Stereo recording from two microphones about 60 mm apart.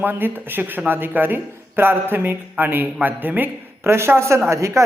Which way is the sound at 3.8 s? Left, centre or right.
Right.